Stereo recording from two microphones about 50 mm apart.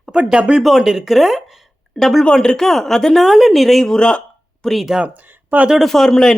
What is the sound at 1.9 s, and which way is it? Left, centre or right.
A man's voice, centre.